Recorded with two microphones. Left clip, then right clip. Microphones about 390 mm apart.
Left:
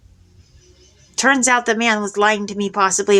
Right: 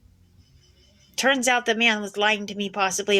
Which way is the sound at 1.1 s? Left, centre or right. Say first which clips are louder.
Left 6 dB; right.